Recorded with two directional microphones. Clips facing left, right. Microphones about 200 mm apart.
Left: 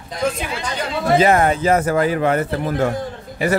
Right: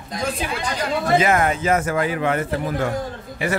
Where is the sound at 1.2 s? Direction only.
35° left (ahead or behind).